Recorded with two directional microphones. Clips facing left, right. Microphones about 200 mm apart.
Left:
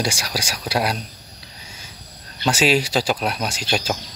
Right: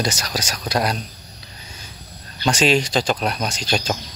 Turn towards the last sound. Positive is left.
turn(degrees=5)  # may be behind; listen again after turning